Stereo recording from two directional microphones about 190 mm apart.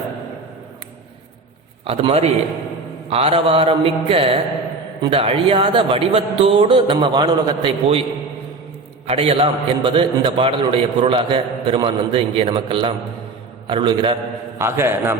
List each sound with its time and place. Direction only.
1.8 s a man's voice: 30° right (ahead or behind)
9.0 s a man's voice: 30° right (ahead or behind)
14.6 s a man's voice: 10° right (ahead or behind)